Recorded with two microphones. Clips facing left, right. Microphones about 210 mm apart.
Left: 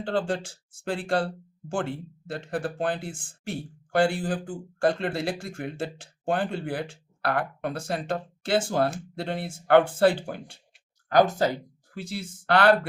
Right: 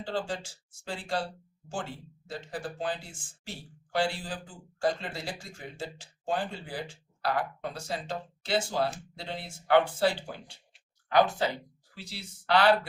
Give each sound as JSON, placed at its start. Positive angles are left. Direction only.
{"t": 0.0, "sound": "speech", "side_deg": 60}